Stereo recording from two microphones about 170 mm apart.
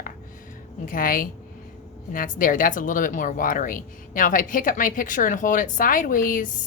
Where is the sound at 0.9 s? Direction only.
55° left (ahead or behind).